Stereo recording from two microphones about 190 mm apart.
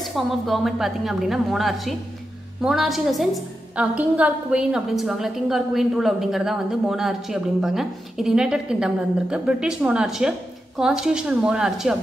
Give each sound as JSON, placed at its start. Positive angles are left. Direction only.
{"t": 0.0, "sound": "a woman's voice", "side_deg": 0}